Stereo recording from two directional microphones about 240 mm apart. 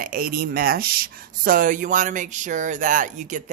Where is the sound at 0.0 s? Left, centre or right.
Right.